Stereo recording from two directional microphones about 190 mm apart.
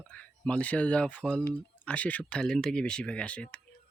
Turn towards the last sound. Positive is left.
turn(degrees=5)  # may be behind; listen again after turning